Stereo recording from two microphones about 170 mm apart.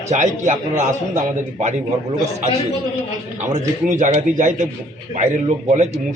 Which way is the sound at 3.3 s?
45° right (ahead or behind).